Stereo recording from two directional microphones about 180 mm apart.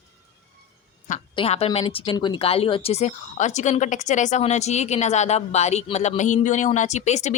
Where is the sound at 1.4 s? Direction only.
35° left (ahead or behind).